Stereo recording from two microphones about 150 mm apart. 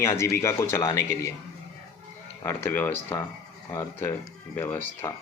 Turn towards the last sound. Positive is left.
turn(degrees=15)  # may be behind; listen again after turning